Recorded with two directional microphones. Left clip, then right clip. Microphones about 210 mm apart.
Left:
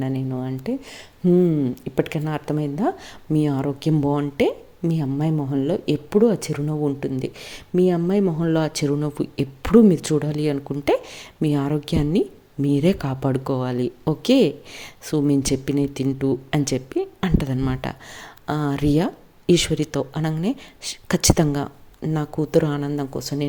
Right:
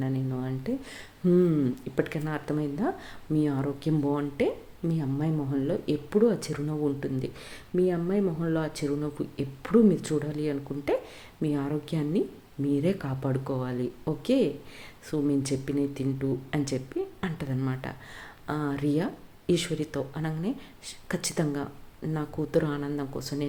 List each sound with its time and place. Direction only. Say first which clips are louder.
0.0 s speech: left 6 dB; 30° left (ahead or behind)